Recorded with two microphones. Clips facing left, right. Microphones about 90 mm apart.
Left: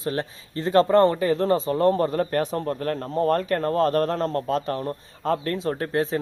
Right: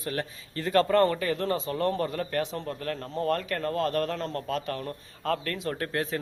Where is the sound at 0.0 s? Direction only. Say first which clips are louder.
Left 5 dB; 30° left (ahead or behind).